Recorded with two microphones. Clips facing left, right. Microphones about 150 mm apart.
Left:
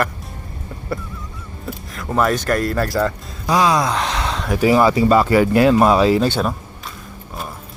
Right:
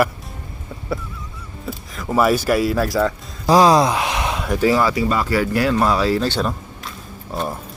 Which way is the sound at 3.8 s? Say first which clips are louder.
Right 1 dB; 15° right (ahead or behind).